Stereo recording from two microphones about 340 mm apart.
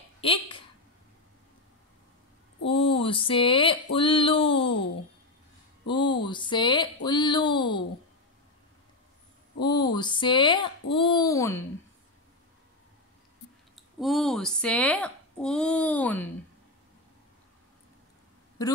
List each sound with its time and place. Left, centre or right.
0.2 s speech: centre
2.7 s a sound: centre
5.9 s a sound: centre
9.6 s babbling: centre
13.7 s speech: centre
18.6 s a woman's voice: centre